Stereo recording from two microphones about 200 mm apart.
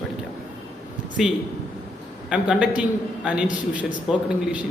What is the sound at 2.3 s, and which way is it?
A man's voice, 5° right (ahead or behind).